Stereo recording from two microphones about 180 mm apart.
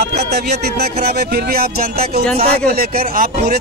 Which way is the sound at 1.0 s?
60° right (ahead or behind).